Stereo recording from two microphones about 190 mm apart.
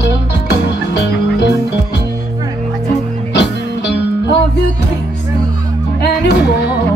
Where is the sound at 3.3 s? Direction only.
65° left (ahead or behind).